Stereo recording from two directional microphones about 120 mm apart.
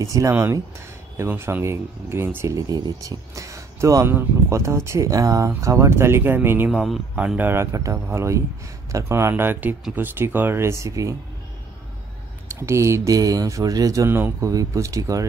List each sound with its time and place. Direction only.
0.0 s speech: 25° right (ahead or behind)
6.7 s speech: 5° right (ahead or behind); by 11.1 s 25° right (ahead or behind)
12.5 s speech: 25° right (ahead or behind)